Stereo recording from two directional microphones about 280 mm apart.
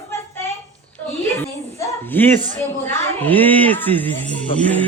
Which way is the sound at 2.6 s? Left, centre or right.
Centre.